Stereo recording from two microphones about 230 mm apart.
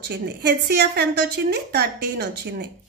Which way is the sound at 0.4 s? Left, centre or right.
Right.